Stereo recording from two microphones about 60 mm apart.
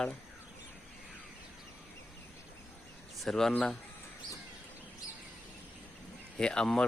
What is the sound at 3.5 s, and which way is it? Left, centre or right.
Speech, centre.